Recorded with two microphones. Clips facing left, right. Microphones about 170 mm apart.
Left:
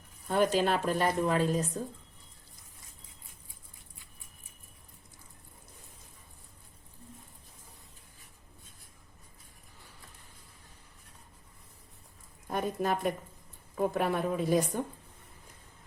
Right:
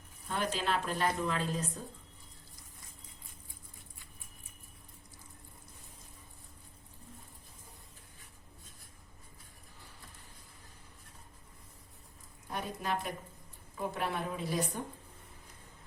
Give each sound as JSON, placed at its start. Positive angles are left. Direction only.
{"t": 0.3, "sound": "speech", "side_deg": 45}
{"t": 12.5, "sound": "a sound", "side_deg": 45}
{"t": 13.7, "sound": "speech", "side_deg": 50}